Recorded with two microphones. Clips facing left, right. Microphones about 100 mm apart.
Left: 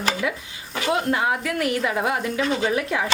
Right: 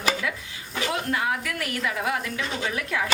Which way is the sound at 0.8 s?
30° left (ahead or behind).